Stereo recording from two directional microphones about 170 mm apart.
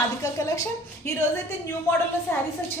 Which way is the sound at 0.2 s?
15° left (ahead or behind).